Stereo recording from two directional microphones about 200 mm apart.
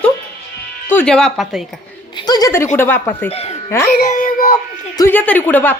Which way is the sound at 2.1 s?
20° left (ahead or behind).